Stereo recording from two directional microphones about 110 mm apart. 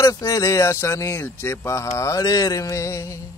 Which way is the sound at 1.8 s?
30° left (ahead or behind).